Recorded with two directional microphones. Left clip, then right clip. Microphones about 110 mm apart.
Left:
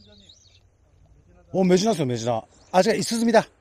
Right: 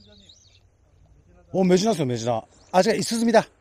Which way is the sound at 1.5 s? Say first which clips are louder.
Even; 5° right (ahead or behind).